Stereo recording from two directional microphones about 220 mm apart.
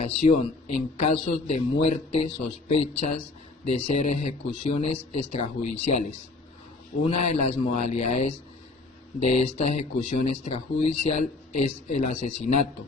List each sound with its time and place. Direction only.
0.0 s speech: 30° left (ahead or behind)
7.0 s speech: 25° left (ahead or behind)